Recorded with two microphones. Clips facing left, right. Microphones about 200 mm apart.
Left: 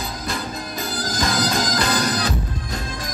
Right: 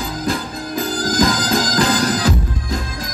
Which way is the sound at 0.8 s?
90° right.